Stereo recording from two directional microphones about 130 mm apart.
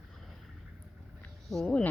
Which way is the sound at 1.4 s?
5° left (ahead or behind).